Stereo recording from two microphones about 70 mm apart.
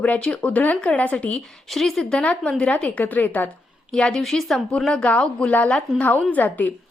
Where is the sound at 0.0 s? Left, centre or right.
Centre.